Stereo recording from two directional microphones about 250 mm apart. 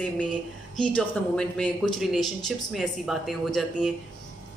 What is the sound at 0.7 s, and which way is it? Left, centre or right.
A woman's voice, centre.